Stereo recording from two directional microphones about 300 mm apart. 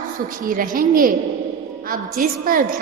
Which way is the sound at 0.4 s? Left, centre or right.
Right.